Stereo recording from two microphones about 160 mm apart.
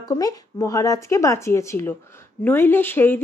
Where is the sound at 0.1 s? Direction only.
20° left (ahead or behind).